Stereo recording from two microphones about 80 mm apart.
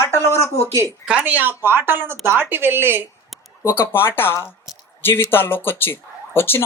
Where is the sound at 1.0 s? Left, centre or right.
Centre.